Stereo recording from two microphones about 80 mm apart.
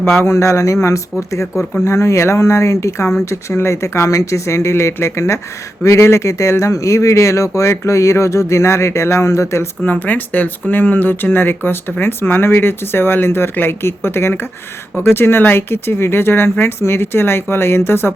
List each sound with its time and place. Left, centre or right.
0.2 s speech: left
9.8 s speech: left